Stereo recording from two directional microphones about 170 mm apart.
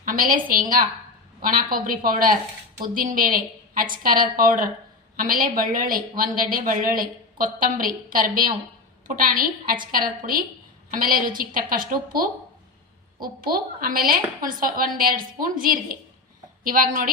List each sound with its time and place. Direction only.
0.0 s a woman's voice: 55° right (ahead or behind)